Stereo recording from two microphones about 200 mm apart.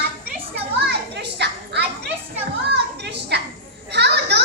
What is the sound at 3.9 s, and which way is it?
Children playing, 55° right (ahead or behind).